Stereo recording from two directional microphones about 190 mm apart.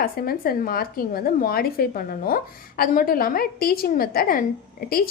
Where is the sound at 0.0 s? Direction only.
50° left (ahead or behind).